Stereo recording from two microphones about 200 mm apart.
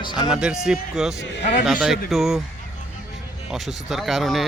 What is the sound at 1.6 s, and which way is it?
Speech, centre (ahead or behind).